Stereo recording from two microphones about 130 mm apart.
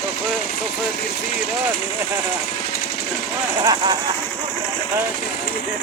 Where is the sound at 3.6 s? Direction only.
30° right (ahead or behind).